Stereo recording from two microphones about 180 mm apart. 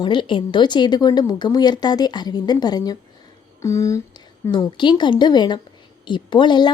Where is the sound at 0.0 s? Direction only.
25° left (ahead or behind).